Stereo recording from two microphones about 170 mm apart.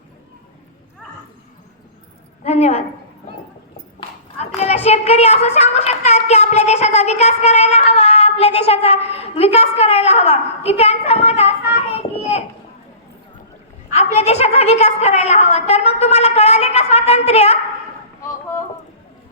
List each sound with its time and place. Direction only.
2.4 s a woman's voice: 40° left (ahead or behind)
4.4 s a woman's voice: 40° left (ahead or behind)
11.9 s a sound: 35° left (ahead or behind)
13.9 s a woman's voice: 40° left (ahead or behind)